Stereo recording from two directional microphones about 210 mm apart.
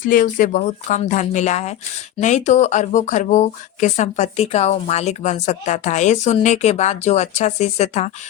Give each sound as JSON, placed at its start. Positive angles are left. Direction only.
{"t": 0.0, "sound": "speech", "side_deg": 40}